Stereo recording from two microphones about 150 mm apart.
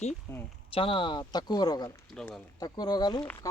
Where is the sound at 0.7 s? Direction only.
35° left (ahead or behind).